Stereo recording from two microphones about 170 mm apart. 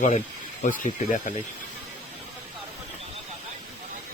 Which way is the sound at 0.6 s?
50° left (ahead or behind).